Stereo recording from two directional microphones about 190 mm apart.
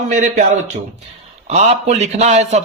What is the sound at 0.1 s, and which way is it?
Speech, 40° right (ahead or behind).